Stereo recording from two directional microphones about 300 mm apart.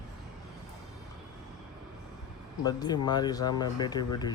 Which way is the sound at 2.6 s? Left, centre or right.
Centre.